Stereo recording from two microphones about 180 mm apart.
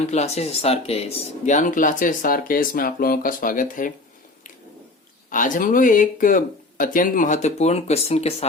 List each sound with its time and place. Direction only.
0.1 s speech: 35° left (ahead or behind)
5.3 s speech: 45° left (ahead or behind)